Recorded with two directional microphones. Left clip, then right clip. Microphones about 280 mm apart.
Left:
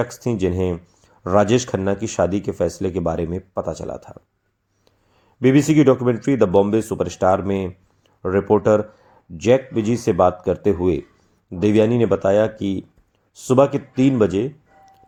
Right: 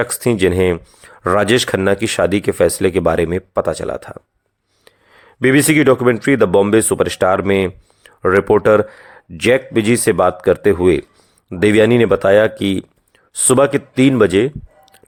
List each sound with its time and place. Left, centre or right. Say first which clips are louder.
0.0 s speech: right 7 dB; right